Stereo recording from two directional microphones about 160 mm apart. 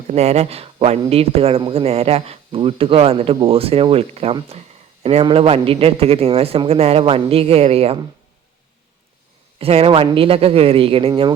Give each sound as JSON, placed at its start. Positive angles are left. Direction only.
{"t": 0.1, "sound": "speech", "side_deg": -40}
{"t": 9.6, "sound": "speech", "side_deg": -35}